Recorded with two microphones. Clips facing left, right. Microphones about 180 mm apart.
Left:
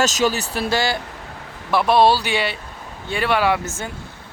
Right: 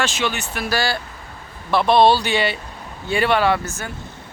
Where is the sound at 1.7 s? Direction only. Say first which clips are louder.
Right 1 dB; 5° left (ahead or behind).